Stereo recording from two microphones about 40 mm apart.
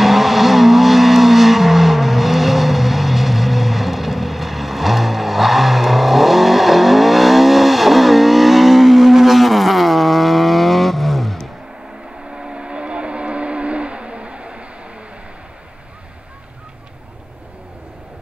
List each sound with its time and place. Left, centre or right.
0.0 s vehicle: centre
12.4 s vehicle: right